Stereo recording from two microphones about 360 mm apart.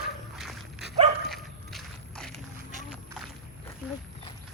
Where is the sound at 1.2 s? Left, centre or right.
Centre.